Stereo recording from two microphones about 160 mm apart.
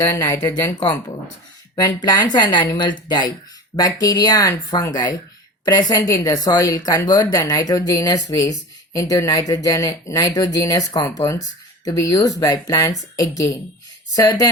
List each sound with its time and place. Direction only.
0.0 s a woman's voice: 20° left (ahead or behind)